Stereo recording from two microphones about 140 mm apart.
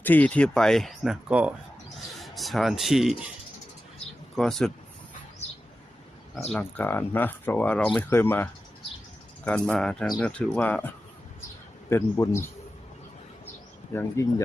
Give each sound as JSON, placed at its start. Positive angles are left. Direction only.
{"t": 0.0, "sound": "speech", "side_deg": 10}
{"t": 4.4, "sound": "speech", "side_deg": 0}
{"t": 6.5, "sound": "a man's voice", "side_deg": 10}
{"t": 13.9, "sound": "a man's voice", "side_deg": 20}